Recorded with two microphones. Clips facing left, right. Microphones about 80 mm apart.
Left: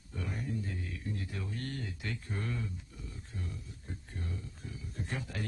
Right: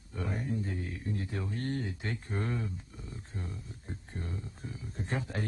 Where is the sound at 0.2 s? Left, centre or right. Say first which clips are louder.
Right 4 dB; right.